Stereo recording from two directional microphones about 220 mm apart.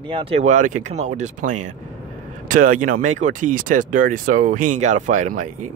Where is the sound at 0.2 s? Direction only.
30° right (ahead or behind).